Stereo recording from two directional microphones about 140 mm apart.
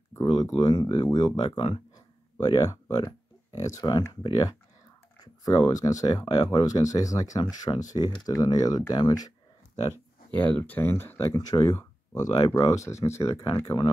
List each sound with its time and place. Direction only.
0.2 s speech: 30° left (ahead or behind)
10.3 s speech: 10° left (ahead or behind)